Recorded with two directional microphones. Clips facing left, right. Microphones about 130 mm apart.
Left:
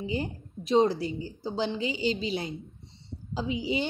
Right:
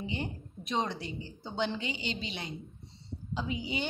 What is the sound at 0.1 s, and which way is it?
A woman's voice, 35° left (ahead or behind).